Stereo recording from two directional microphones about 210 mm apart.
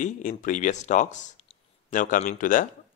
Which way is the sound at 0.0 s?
35° left (ahead or behind).